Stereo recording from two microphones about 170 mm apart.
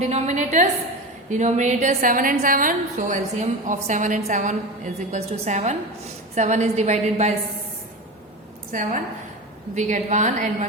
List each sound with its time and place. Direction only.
0.0 s a woman's voice: 45° right (ahead or behind)
8.7 s a woman's voice: 50° right (ahead or behind)